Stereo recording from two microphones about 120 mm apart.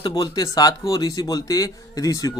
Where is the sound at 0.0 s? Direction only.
35° left (ahead or behind).